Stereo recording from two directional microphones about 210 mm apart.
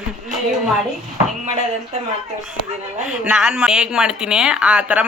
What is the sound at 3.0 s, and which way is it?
Speech, 5° right (ahead or behind).